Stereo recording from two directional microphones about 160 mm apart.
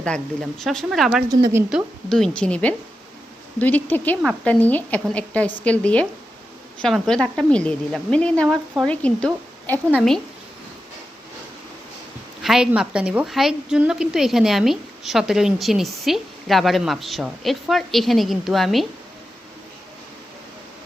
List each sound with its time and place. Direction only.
0.6 s a woman's voice: centre (ahead or behind)
1.3 s speech: 20° right (ahead or behind)
1.7 s a woman's voice: 5° left (ahead or behind)
8.4 s a woman's voice: 5° right (ahead or behind)
8.9 s a woman's voice: 10° left (ahead or behind)
12.4 s a woman's voice: 5° right (ahead or behind)